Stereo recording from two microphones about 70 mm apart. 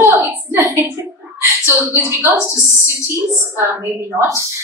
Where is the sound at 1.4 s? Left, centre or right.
Right.